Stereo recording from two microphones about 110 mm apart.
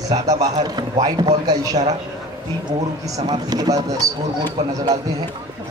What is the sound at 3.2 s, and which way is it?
A man's voice, 35° right (ahead or behind).